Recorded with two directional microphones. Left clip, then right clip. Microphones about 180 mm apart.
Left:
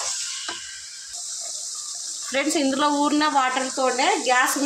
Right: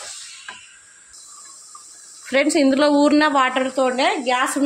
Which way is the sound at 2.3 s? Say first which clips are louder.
Right 6 dB; 45° right (ahead or behind).